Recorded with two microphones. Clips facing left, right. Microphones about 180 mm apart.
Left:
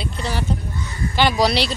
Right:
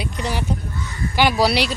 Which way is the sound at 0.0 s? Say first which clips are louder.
Right 1 dB; 15° right (ahead or behind).